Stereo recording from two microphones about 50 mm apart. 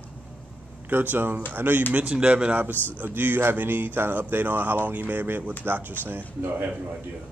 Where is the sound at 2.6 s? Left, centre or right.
Right.